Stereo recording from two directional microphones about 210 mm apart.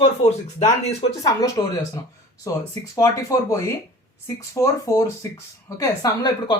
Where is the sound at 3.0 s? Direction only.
15° left (ahead or behind).